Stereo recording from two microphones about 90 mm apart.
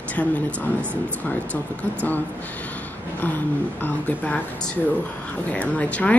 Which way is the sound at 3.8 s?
15° left (ahead or behind).